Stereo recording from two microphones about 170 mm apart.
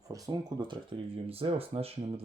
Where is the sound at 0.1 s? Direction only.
20° right (ahead or behind).